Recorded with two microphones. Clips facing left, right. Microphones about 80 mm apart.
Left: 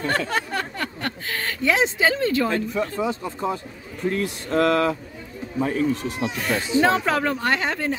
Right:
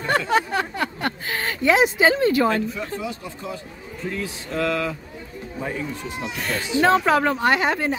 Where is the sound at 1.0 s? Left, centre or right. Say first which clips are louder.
Right 2 dB; centre.